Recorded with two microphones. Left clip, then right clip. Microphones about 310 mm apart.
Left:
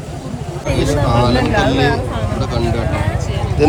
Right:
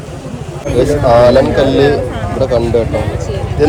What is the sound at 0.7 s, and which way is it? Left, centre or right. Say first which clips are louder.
Speech: right 7 dB; centre.